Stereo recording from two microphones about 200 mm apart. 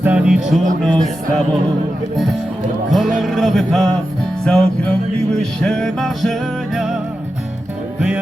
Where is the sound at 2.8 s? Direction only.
Centre (ahead or behind).